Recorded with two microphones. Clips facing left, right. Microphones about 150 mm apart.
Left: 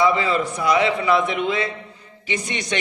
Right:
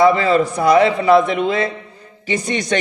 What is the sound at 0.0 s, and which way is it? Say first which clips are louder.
A woman's voice: right 6 dB; 45° right (ahead or behind).